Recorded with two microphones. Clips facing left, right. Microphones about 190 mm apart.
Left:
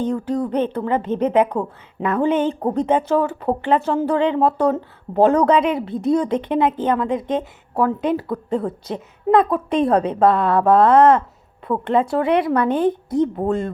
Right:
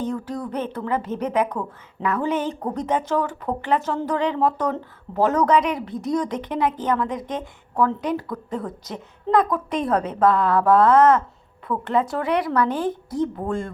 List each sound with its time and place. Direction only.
0.1 s a woman's voice: 35° left (ahead or behind)